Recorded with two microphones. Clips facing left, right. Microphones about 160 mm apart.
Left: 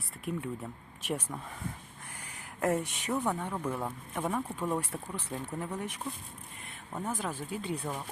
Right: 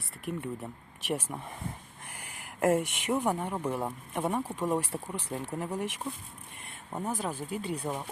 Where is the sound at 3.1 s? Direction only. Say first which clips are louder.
Right 2 dB; 25° right (ahead or behind).